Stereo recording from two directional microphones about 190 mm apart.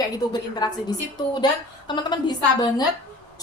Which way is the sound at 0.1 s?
20° left (ahead or behind).